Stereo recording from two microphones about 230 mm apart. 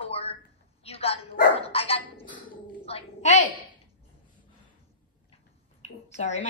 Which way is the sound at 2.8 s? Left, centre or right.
Left.